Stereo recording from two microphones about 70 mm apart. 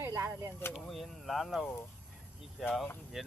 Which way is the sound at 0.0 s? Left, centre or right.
Right.